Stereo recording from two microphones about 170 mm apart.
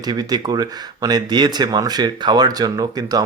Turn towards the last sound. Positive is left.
turn(degrees=-20)  # may be behind; listen again after turning